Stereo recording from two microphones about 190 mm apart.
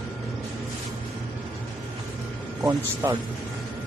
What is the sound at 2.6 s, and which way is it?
Speech, 15° right (ahead or behind).